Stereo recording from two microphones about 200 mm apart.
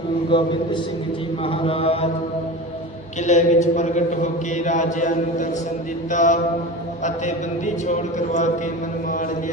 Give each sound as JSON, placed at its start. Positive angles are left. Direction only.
{"t": 0.3, "sound": "mantra", "side_deg": 25}
{"t": 3.2, "sound": "a man's voice", "side_deg": 35}